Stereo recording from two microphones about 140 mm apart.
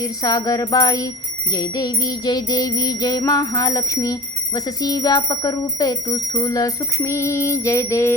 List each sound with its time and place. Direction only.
0.0 s wind chime: 25° left (ahead or behind)